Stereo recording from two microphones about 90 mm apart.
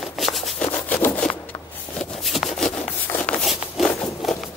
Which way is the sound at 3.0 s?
20° left (ahead or behind).